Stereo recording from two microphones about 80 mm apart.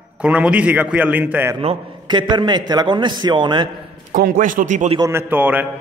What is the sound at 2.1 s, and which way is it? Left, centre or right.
A man's voice, right.